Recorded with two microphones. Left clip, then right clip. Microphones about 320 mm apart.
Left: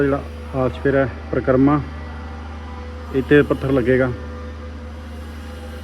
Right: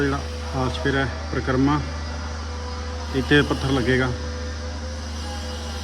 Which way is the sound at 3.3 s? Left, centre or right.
Centre.